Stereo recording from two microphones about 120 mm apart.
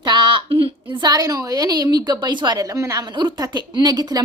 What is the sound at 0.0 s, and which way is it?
A woman's voice, 40° right (ahead or behind).